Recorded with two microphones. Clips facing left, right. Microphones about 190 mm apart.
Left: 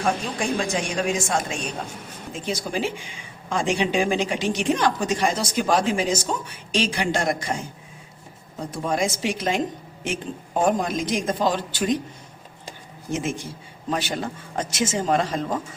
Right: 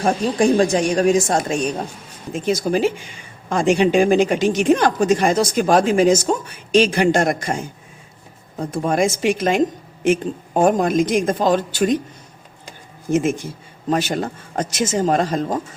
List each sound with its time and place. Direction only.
0.0 s a woman's voice: 40° right (ahead or behind)
2.6 s speech: 45° right (ahead or behind)
8.7 s speech: 55° right (ahead or behind)
13.9 s speech: 45° right (ahead or behind)